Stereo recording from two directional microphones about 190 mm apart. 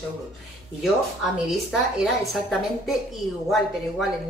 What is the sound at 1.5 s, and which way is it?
A woman's voice, centre (ahead or behind).